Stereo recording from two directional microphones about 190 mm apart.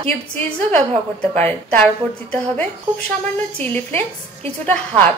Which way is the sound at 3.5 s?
10° left (ahead or behind).